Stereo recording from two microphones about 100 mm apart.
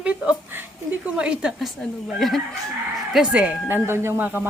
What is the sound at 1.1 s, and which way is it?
Speech, 10° right (ahead or behind).